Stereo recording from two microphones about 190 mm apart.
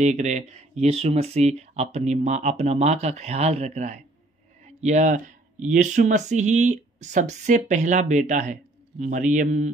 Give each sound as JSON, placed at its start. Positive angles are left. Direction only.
{"t": 0.0, "sound": "speech", "side_deg": -40}